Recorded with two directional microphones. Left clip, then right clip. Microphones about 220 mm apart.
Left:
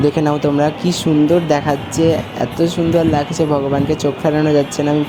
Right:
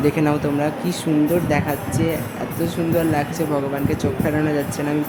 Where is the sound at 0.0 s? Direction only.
20° left (ahead or behind).